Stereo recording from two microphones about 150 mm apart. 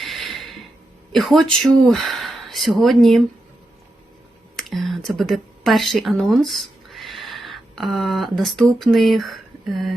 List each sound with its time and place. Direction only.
0.0 s a sound: centre (ahead or behind)
1.1 s speech: centre (ahead or behind)
4.5 s speech: centre (ahead or behind)